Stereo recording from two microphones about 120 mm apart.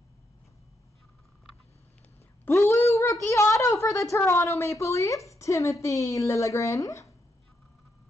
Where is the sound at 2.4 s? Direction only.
25° left (ahead or behind).